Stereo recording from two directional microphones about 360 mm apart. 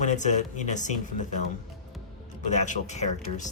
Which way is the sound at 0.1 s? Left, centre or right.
Centre.